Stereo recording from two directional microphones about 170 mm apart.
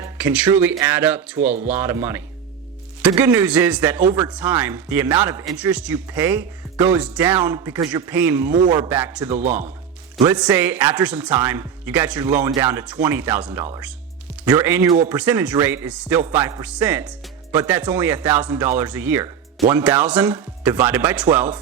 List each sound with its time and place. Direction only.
0.0 s speech: 10° right (ahead or behind)